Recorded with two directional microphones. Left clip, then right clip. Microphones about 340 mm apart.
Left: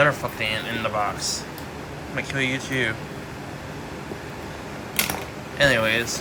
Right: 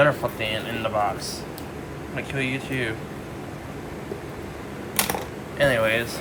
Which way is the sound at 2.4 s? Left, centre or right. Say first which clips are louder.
Left 2 dB; right.